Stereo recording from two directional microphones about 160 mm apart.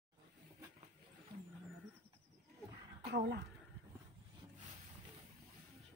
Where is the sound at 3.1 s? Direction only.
90° right.